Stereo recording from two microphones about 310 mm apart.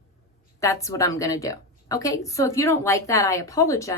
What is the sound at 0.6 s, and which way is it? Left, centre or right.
A woman's voice, centre.